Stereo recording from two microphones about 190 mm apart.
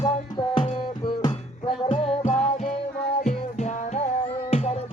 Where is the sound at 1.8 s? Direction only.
40° left (ahead or behind).